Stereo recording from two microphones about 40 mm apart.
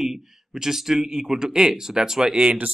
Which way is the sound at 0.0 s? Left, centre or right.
Centre.